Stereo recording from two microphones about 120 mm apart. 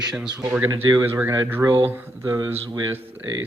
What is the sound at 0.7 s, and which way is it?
Speech, 35° right (ahead or behind).